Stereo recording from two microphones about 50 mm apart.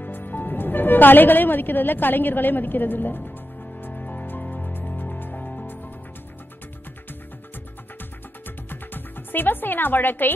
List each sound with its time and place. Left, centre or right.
0.0 s a woman's voice: left
3.8 s music: left
8.5 s music: left